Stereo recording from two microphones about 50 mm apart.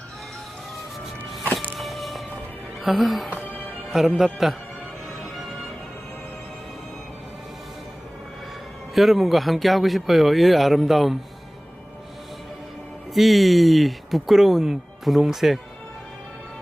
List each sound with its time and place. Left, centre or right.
1.8 s music: centre
2.8 s speech: centre
3.2 s music: left
4.2 s speech: centre
9.0 s speech: centre
13.1 s speech: centre